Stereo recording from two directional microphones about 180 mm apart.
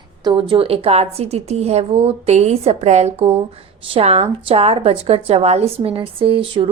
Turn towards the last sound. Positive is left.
turn(degrees=-30)  # may be behind; listen again after turning